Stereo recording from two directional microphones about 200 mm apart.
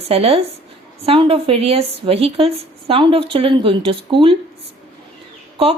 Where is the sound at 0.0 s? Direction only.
30° right (ahead or behind).